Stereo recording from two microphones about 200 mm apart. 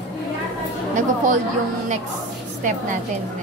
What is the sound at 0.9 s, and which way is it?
Speech, 40° right (ahead or behind).